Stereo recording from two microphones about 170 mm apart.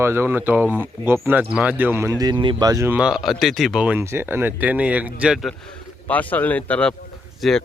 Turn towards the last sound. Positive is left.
turn(degrees=0)  # may be behind; listen again after turning